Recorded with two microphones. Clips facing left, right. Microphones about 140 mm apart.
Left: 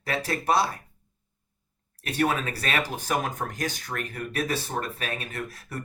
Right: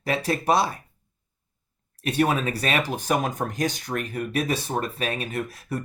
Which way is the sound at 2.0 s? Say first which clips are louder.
Right 3 dB; 20° right (ahead or behind).